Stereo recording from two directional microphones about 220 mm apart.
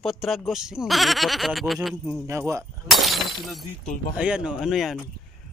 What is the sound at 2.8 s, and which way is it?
Breaking, centre (ahead or behind).